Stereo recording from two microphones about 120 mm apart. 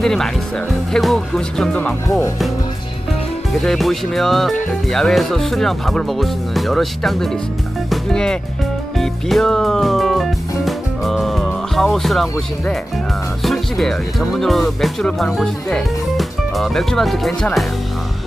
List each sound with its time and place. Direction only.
0.0 s speech: 5° left (ahead or behind)
2.0 s speech: 25° left (ahead or behind)
3.5 s speech: centre (ahead or behind)
9.0 s music: 5° left (ahead or behind)
13.4 s speech: centre (ahead or behind)